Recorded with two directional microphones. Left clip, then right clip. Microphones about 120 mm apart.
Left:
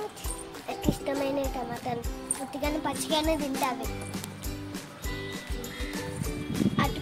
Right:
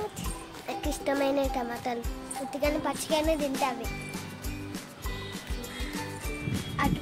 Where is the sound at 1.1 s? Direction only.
55° right (ahead or behind).